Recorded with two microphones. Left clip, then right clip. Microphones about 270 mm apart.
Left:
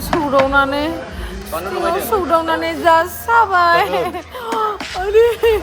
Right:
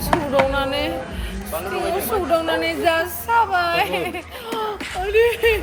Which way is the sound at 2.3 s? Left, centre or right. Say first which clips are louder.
Left 2 dB; centre.